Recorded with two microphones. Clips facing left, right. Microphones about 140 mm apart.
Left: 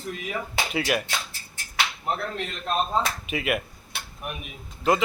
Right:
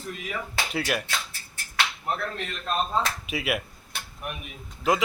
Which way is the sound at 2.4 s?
15° left (ahead or behind).